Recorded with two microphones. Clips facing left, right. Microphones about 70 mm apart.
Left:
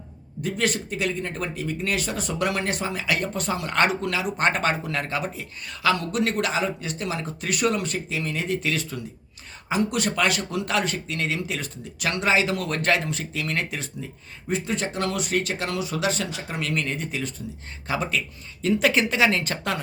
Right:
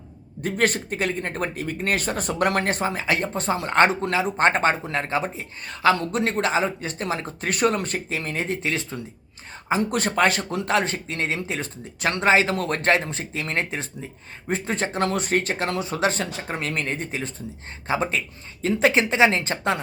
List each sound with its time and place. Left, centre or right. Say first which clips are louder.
0.4 s speech: right 3 dB; right